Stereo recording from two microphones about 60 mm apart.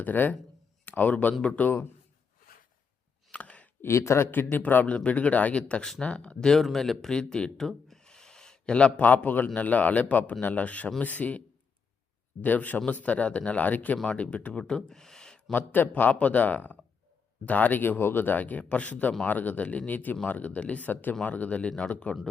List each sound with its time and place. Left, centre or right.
0.0 s speech: left
3.3 s a sound: left
3.8 s speech: left
4.5 s speech: left; by 6.6 s centre
6.6 s speech: centre
7.1 s a sound: centre
9.0 s speech: left; by 15.5 s centre
15.5 s speech: left